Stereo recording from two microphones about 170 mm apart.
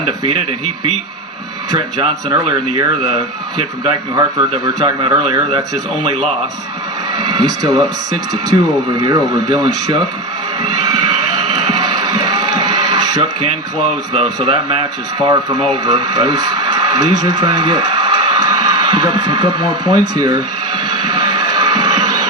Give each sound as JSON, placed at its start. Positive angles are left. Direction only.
{"t": 1.7, "sound": "speech", "side_deg": -25}
{"t": 4.1, "sound": "speech", "side_deg": -25}
{"t": 7.2, "sound": "speech", "side_deg": -25}
{"t": 9.0, "sound": "speech", "side_deg": -25}
{"t": 10.6, "sound": "music", "side_deg": -20}
{"t": 14.3, "sound": "speech", "side_deg": -30}
{"t": 20.9, "sound": "a sound", "side_deg": -25}